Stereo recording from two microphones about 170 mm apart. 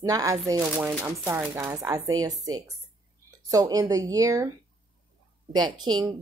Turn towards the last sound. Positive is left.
turn(degrees=-25)  # may be behind; listen again after turning